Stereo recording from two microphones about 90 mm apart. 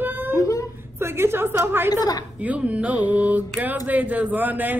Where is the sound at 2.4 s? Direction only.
15° right (ahead or behind).